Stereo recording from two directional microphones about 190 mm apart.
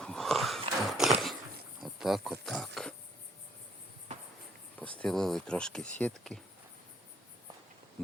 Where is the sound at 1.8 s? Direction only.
Centre (ahead or behind).